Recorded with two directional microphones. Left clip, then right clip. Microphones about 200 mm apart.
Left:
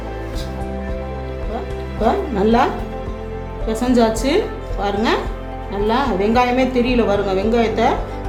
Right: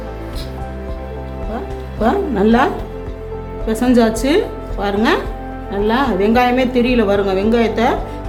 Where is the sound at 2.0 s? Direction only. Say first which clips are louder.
Right 2 dB; 15° right (ahead or behind).